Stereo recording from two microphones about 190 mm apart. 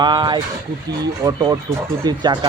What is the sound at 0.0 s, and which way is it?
Speech, 25° right (ahead or behind).